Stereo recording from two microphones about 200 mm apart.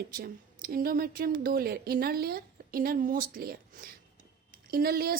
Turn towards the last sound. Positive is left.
turn(degrees=-50)  # may be behind; listen again after turning